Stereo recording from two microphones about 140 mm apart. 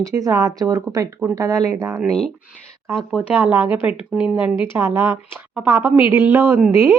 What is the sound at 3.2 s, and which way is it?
Speech, 10° right (ahead or behind).